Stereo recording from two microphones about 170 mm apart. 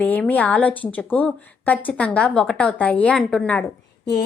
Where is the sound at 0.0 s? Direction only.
10° left (ahead or behind).